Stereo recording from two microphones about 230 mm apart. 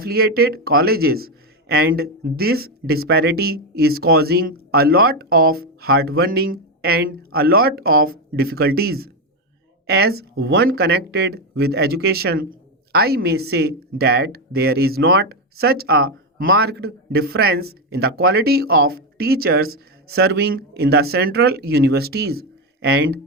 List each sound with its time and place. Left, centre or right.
0.0 s speech: right